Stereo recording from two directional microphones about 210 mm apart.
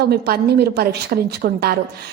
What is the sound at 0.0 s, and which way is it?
A woman's voice, 50° right (ahead or behind).